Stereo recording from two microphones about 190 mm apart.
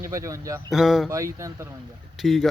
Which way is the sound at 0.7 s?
Centre (ahead or behind).